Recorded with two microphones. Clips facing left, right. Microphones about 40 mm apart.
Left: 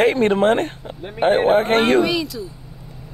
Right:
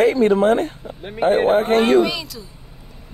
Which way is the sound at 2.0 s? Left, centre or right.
Centre.